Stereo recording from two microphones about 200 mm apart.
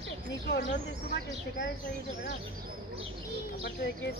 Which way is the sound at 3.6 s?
50° left (ahead or behind).